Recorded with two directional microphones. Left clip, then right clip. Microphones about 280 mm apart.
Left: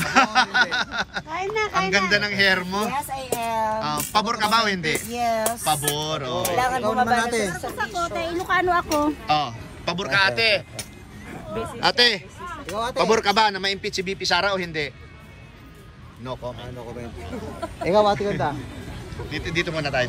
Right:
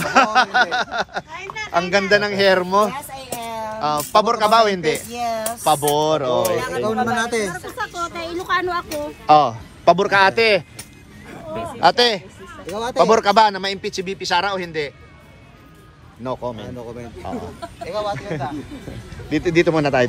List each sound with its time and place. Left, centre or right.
0.0 s speech: centre
6.8 s speech: right
7.2 s speech: centre
9.2 s speech: centre
16.3 s speech: centre
17.8 s speech: left
19.2 s speech: centre